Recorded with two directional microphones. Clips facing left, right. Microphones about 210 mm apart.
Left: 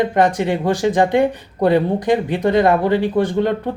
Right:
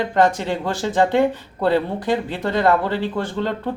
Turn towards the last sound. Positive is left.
turn(degrees=15)  # may be behind; listen again after turning